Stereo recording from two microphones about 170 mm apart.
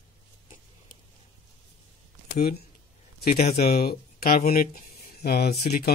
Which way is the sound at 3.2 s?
65° left (ahead or behind).